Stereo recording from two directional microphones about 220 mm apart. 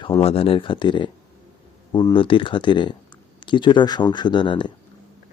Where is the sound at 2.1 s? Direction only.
25° left (ahead or behind).